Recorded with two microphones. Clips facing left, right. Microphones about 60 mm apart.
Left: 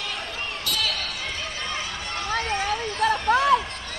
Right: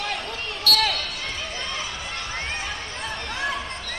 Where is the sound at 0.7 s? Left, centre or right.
Right.